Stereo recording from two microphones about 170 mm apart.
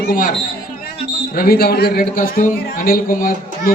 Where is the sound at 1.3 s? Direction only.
60° left (ahead or behind).